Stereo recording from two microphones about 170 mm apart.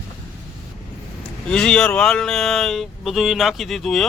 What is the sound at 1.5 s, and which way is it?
Speech, 5° left (ahead or behind).